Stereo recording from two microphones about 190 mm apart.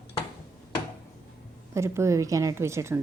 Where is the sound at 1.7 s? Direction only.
15° right (ahead or behind).